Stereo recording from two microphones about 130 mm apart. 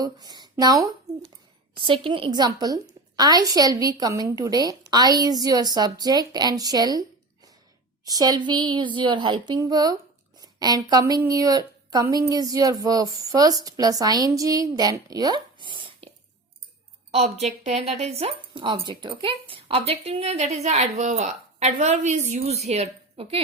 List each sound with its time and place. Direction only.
0.0 s speech: 30° right (ahead or behind)
1.7 s a woman's voice: 40° right (ahead or behind)
8.0 s a woman's voice: 30° right (ahead or behind)
17.1 s speech: 55° right (ahead or behind)